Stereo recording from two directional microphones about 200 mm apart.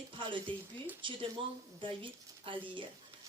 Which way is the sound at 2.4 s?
25° right (ahead or behind).